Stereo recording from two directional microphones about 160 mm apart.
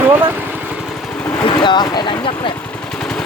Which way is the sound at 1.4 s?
30° left (ahead or behind).